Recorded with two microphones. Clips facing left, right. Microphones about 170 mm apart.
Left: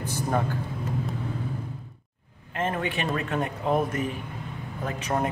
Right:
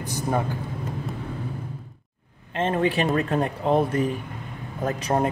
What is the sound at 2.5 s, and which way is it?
A man's voice, 30° right (ahead or behind).